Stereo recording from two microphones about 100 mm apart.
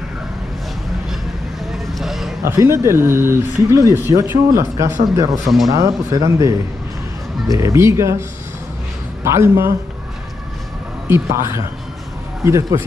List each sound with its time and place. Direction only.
1.7 s vehicle: centre (ahead or behind)
2.4 s speech: 30° right (ahead or behind)
5.4 s speech: centre (ahead or behind)
5.7 s speech: 30° right (ahead or behind)
9.2 s speech: 25° right (ahead or behind)
11.1 s speech: 25° right (ahead or behind)